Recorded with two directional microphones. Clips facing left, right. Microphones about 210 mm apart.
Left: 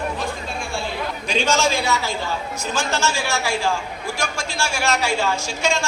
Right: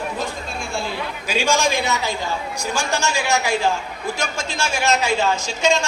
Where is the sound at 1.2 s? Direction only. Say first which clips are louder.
Even; 10° right (ahead or behind).